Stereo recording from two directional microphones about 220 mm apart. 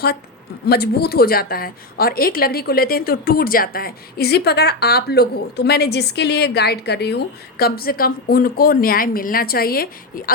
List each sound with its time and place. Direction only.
0.7 s a woman's voice: 45° left (ahead or behind)